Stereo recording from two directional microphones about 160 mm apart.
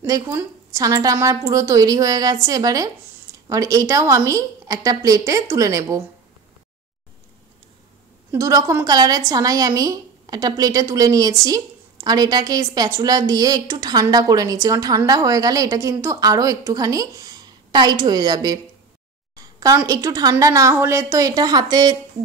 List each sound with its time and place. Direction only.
0.0 s a woman's voice: 20° right (ahead or behind)
8.3 s a woman's voice: 20° right (ahead or behind)
19.3 s a sound: 20° right (ahead or behind)
19.9 s a woman's voice: 20° right (ahead or behind)